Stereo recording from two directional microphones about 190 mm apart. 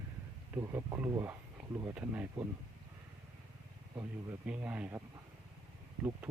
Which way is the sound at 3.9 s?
10° right (ahead or behind).